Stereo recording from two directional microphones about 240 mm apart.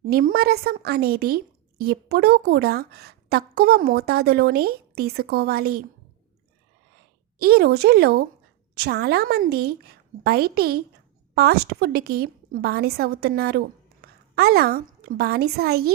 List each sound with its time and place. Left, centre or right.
0.1 s a woman's voice: right
7.3 s a woman's voice: right
14.0 s a sound: right
14.3 s a woman's voice: right